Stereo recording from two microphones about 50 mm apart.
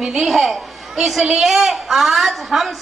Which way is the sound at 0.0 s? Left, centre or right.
Centre.